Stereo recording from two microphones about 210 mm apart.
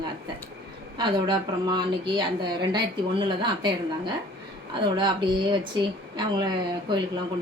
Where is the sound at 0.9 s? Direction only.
20° right (ahead or behind).